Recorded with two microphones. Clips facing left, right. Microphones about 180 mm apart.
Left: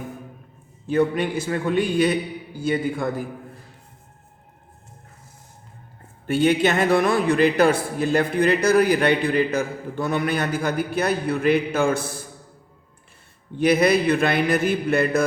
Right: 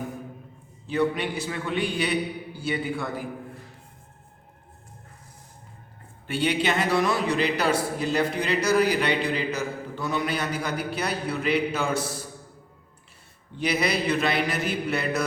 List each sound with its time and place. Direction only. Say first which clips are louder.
0.9 s a man's voice: left 4 dB; 50° left (ahead or behind)
6.2 s a man's voice: left 6 dB; 45° left (ahead or behind)
13.6 s a man's voice: left 8 dB; 50° left (ahead or behind)